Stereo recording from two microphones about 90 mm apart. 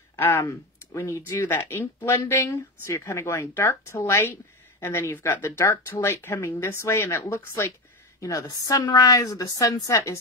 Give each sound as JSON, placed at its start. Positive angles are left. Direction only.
{"t": 0.1, "sound": "a woman's voice", "side_deg": 30}